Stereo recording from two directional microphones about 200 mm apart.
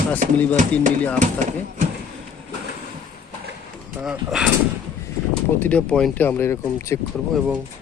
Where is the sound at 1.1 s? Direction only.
40° right (ahead or behind).